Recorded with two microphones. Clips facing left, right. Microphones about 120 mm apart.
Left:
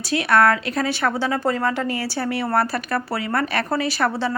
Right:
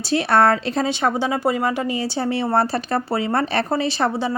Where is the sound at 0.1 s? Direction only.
30° right (ahead or behind).